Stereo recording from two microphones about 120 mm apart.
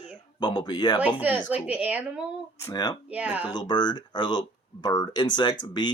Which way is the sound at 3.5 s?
35° left (ahead or behind).